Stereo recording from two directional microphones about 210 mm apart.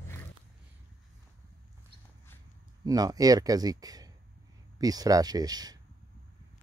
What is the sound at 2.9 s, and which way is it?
Speech, 15° right (ahead or behind).